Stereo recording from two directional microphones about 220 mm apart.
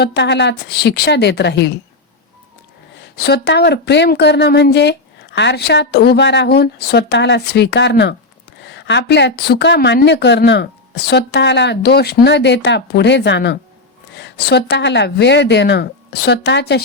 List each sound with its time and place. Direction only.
0.0 s speech: 50° left (ahead or behind)
3.0 s speech: 50° left (ahead or behind)